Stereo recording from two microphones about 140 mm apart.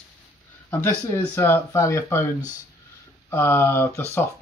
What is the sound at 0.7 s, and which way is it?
Speech, 20° left (ahead or behind).